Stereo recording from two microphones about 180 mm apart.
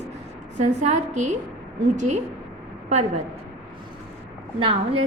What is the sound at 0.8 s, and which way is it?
A woman's voice, 40° right (ahead or behind).